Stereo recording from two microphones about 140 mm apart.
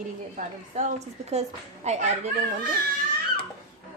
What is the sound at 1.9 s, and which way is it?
Speech, 55° right (ahead or behind).